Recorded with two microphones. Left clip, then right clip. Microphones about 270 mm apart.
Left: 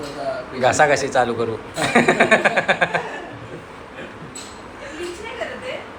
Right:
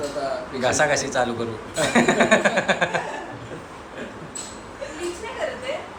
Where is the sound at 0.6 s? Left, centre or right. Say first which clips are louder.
Left 5 dB; centre.